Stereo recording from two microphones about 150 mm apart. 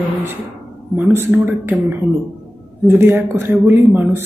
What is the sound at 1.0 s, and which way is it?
Speech, 10° right (ahead or behind).